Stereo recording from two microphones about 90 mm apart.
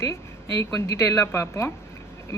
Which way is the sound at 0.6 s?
35° left (ahead or behind).